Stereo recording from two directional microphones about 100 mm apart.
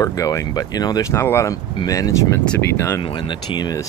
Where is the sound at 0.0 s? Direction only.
35° left (ahead or behind).